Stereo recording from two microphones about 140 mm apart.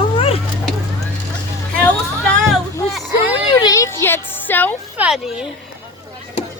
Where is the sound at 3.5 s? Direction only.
25° left (ahead or behind).